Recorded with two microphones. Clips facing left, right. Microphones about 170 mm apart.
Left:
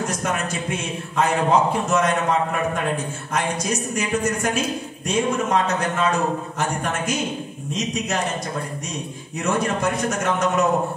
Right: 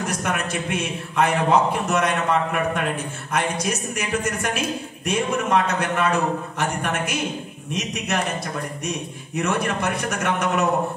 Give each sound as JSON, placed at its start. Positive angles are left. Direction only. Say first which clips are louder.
{"t": 0.2, "sound": "a man's voice", "louder": "even", "side_deg": -60}
{"t": 5.0, "sound": "a man's voice", "louder": "left 1 dB", "side_deg": -65}
{"t": 9.4, "sound": "a man's voice", "louder": "left 1 dB", "side_deg": -60}